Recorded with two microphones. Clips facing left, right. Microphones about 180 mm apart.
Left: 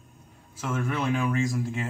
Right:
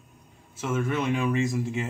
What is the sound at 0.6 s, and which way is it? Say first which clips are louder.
Speech: right 2 dB; 5° right (ahead or behind).